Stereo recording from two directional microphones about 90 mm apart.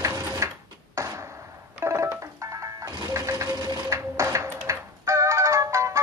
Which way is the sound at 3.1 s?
35° right (ahead or behind).